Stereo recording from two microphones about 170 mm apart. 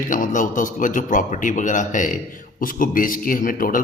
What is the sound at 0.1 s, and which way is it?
Speech, 50° left (ahead or behind).